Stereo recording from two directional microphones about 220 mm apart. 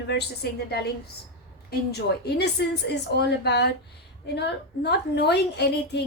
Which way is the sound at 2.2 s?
50° left (ahead or behind).